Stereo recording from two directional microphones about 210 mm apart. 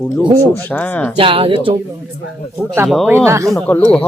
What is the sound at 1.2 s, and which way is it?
Speech, 25° right (ahead or behind).